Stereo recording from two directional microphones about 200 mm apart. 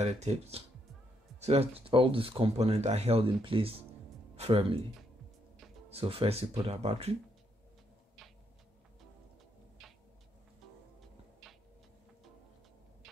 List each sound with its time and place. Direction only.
0.0 s speech: 35° right (ahead or behind)
5.9 s speech: 30° right (ahead or behind)
11.4 s a sound: centre (ahead or behind)